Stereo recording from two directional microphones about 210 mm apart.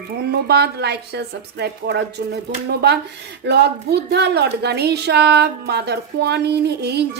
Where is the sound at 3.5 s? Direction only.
50° right (ahead or behind).